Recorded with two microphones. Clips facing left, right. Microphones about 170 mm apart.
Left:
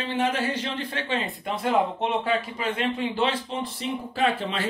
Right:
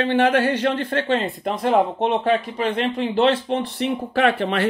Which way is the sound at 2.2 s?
60° right (ahead or behind).